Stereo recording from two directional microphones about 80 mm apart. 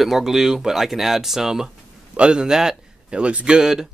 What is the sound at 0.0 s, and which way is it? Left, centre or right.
Speech, centre.